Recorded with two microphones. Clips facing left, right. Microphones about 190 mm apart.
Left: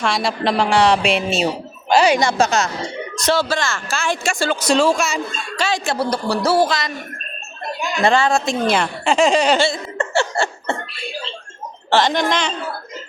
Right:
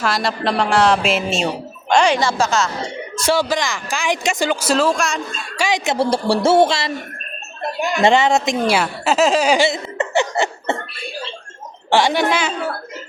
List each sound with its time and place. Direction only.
0.0 s speech: centre (ahead or behind)
2.2 s a woman's voice: 15° left (ahead or behind)
3.2 s speech: 10° right (ahead or behind)
4.6 s speech: centre (ahead or behind)
5.5 s speech: 15° right (ahead or behind)
8.0 s a woman's voice: 20° right (ahead or behind)
11.9 s a woman's voice: 10° right (ahead or behind)